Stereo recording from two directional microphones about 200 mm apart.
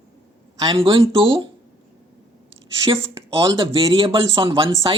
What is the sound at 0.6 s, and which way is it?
Speech, 25° right (ahead or behind).